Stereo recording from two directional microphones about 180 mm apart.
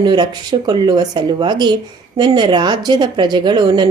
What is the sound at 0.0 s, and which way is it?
Speech, 25° right (ahead or behind).